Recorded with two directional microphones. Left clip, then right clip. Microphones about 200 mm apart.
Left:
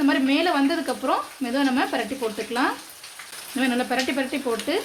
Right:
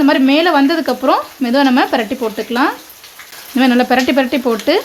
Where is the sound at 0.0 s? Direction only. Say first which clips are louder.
Right 10 dB; 45° right (ahead or behind).